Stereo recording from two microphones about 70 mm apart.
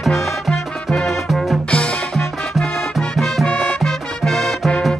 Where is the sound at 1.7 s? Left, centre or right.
Centre.